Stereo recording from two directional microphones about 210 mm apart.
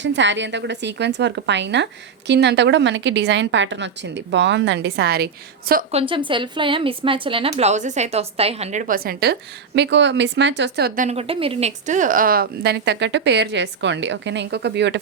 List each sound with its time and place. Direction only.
0.0 s a woman's voice: 60° right (ahead or behind)
5.9 s a woman's voice: 25° right (ahead or behind); by 14.9 s 55° right (ahead or behind)